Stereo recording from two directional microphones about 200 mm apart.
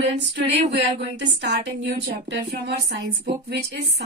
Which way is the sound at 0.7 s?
60° right (ahead or behind).